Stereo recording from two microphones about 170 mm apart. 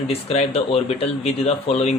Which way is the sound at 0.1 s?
35° left (ahead or behind).